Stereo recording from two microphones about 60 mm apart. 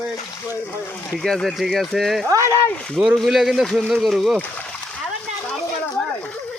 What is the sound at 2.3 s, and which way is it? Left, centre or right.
Speech, right.